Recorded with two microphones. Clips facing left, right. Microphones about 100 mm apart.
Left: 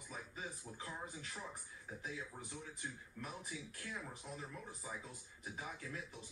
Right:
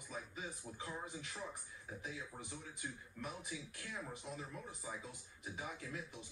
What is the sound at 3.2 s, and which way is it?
Speech, centre (ahead or behind).